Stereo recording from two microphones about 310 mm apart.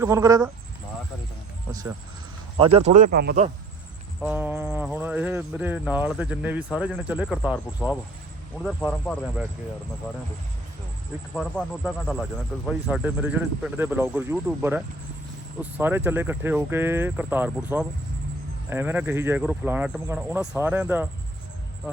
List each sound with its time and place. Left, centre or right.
0.0 s speech: centre
2.6 s speech: centre
4.2 s speech: centre
11.3 s speech: centre
15.8 s speech: centre